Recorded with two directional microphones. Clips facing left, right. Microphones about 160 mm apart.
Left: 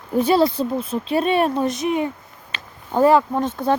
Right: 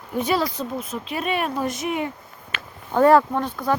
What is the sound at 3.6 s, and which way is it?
Speech, 30° left (ahead or behind).